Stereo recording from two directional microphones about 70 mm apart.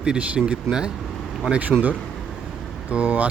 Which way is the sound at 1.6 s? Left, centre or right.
Right.